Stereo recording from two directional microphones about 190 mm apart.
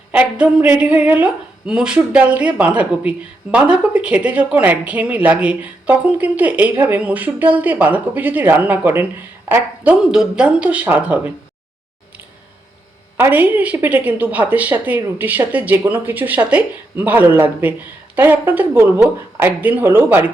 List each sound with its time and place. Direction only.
0.1 s a woman's voice: 5° right (ahead or behind)
13.1 s a woman's voice: 10° right (ahead or behind)